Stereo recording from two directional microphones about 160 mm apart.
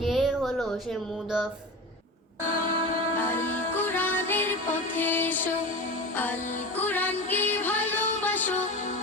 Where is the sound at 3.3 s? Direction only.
55° left (ahead or behind).